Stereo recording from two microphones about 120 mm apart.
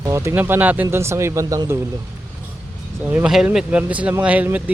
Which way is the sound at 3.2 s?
5° right (ahead or behind).